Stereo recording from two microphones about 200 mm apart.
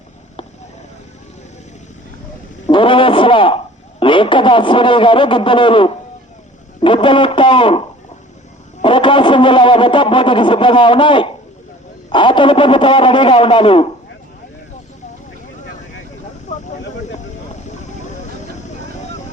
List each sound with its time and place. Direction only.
2.6 s radio: 25° left (ahead or behind)
4.0 s a man's voice: 25° left (ahead or behind)
16.5 s a sound: 35° left (ahead or behind)